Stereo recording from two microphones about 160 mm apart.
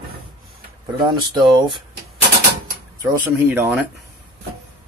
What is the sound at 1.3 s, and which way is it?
Speech, 30° right (ahead or behind).